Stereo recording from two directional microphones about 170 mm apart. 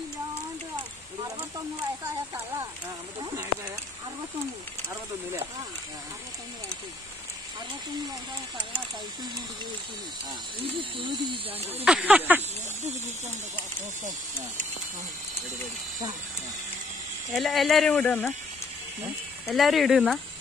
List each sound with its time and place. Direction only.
10.6 s speech: 30° right (ahead or behind)
11.8 s speech: 5° right (ahead or behind)
17.3 s speech: centre (ahead or behind)
19.4 s speech: centre (ahead or behind)